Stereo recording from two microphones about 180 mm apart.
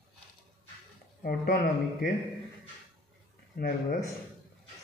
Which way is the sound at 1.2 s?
55° left (ahead or behind).